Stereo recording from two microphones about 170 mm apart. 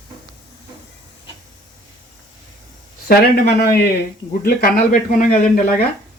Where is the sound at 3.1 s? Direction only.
65° left (ahead or behind).